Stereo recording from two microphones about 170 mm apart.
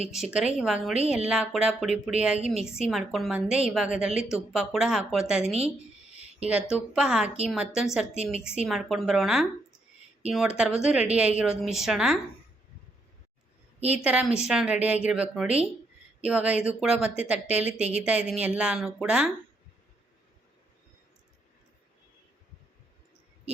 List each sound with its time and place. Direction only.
0.1 s a woman's voice: 5° right (ahead or behind)
5.5 s speech: 40° right (ahead or behind)
6.5 s a woman's voice: 5° right (ahead or behind)
13.8 s a woman's voice: 10° right (ahead or behind)